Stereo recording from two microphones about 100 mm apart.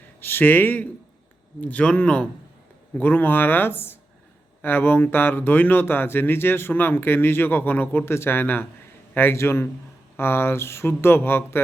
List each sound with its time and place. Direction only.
0.2 s speech: 20° left (ahead or behind)